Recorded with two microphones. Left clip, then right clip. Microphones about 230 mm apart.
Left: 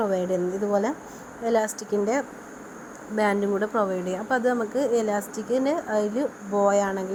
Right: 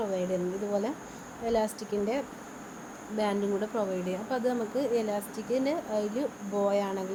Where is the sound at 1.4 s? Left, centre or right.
Centre.